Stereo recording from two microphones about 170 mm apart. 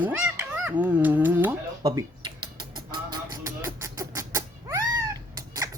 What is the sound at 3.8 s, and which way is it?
Cat, 20° right (ahead or behind).